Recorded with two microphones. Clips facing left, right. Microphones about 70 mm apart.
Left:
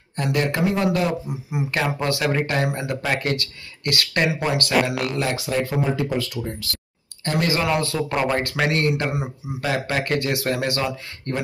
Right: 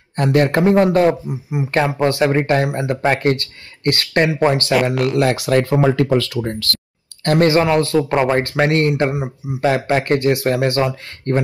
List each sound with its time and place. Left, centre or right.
0.1 s a man's voice: right
1.3 s speech: right
5.1 s speech: right
7.2 s a man's voice: right
8.1 s speech: right